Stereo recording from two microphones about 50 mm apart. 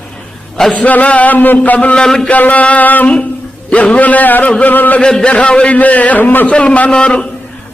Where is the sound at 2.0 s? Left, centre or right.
Centre.